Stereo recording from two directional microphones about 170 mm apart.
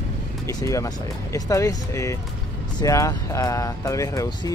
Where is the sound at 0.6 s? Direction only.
20° left (ahead or behind).